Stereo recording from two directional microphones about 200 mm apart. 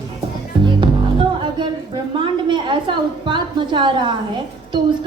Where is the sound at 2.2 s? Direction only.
25° right (ahead or behind).